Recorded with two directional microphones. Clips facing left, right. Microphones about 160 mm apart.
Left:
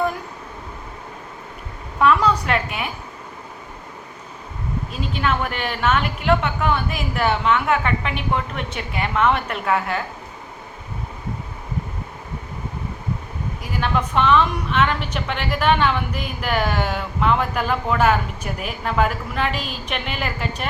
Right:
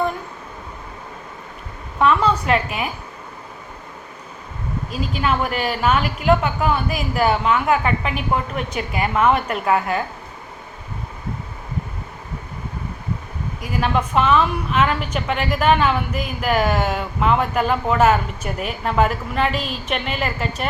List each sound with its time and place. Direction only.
2.0 s a woman's voice: centre (ahead or behind)
5.8 s a woman's voice: 5° right (ahead or behind)
13.7 s a woman's voice: 5° right (ahead or behind)